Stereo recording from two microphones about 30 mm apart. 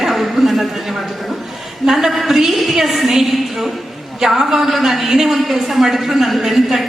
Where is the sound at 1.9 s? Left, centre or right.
Centre.